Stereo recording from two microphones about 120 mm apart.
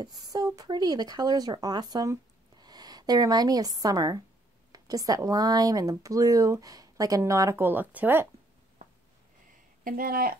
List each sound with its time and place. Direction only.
0.0 s speech: 35° right (ahead or behind); by 8.3 s 15° right (ahead or behind)